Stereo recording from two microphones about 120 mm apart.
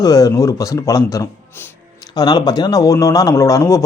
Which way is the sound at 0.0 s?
30° left (ahead or behind).